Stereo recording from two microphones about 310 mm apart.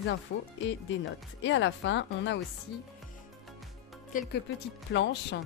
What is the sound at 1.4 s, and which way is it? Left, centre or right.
Speech, left.